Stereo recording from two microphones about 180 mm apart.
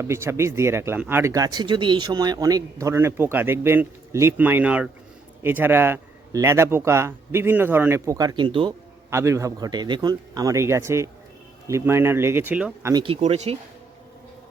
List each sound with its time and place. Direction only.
0.0 s speech: 15° right (ahead or behind)
9.0 s speech: 15° right (ahead or behind)
12.9 s speech: 30° right (ahead or behind)